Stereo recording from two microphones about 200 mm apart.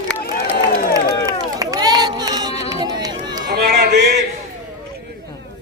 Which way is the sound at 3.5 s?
50° right (ahead or behind).